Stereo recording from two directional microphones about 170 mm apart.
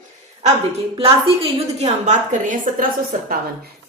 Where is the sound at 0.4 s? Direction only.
35° right (ahead or behind).